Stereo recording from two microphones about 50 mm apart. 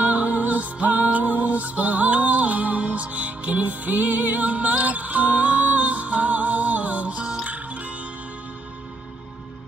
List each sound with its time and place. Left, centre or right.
0.0 s music: right